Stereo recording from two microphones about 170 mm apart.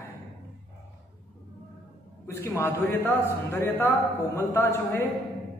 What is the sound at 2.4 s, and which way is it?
A man's voice, 15° left (ahead or behind).